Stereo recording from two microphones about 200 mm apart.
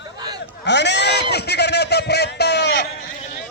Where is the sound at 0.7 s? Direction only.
60° left (ahead or behind).